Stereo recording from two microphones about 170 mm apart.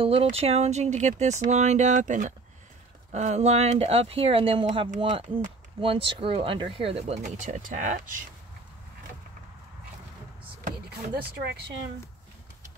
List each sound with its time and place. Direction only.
0.0 s speech: 35° right (ahead or behind)
4.9 s speech: 45° right (ahead or behind)
5.8 s speech: 30° right (ahead or behind); by 8.2 s 50° right (ahead or behind)
11.4 s speech: 80° right